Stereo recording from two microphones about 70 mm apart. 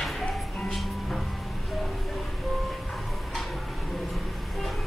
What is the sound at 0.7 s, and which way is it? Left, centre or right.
Music, centre.